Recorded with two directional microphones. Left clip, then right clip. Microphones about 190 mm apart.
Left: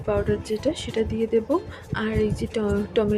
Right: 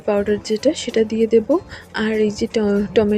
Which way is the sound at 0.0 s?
25° right (ahead or behind).